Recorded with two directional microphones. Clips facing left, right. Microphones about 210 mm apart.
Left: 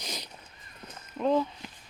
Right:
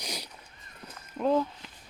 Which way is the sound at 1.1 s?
Centre (ahead or behind).